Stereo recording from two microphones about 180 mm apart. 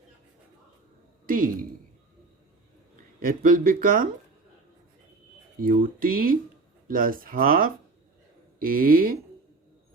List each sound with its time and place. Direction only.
3.2 s speech: 55° right (ahead or behind)
5.6 s speech: 50° right (ahead or behind)